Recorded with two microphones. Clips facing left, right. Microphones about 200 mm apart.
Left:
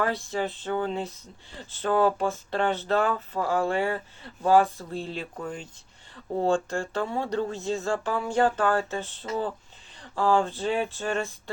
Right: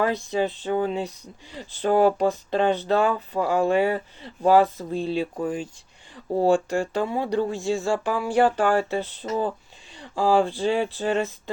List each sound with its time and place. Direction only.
0.0 s speech: 15° right (ahead or behind)